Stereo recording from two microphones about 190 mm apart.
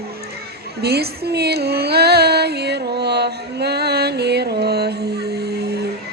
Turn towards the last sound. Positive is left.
turn(degrees=-60)  # may be behind; listen again after turning